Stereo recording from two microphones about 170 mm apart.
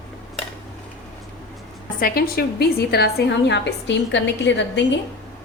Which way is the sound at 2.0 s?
65° left (ahead or behind).